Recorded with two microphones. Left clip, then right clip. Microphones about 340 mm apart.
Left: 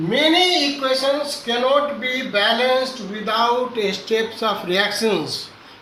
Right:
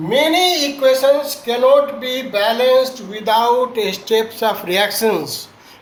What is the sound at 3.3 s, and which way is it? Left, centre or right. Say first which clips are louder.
Speech: right 5 dB; centre.